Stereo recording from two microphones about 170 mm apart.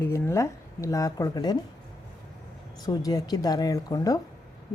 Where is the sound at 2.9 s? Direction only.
25° left (ahead or behind).